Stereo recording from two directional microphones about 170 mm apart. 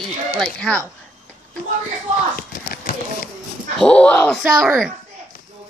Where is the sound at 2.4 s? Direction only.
60° left (ahead or behind).